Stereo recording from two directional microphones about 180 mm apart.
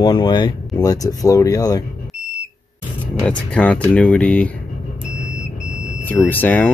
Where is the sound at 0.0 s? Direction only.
25° left (ahead or behind).